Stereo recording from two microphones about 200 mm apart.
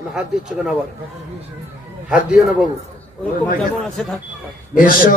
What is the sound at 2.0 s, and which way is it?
Speech, centre (ahead or behind).